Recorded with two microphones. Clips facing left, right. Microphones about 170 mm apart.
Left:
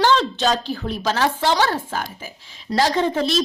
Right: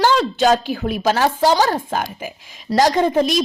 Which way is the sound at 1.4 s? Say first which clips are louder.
Right 5 dB; 40° right (ahead or behind).